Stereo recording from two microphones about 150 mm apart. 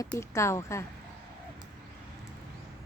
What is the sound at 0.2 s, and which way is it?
Speech, 20° left (ahead or behind).